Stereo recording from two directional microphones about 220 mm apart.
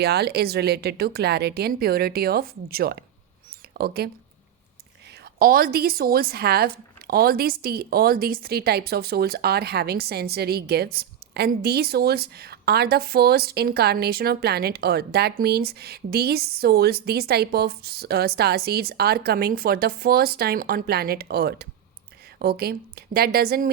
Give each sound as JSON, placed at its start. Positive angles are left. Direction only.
{"t": 0.0, "sound": "speech", "side_deg": -45}
{"t": 5.4, "sound": "speech", "side_deg": -40}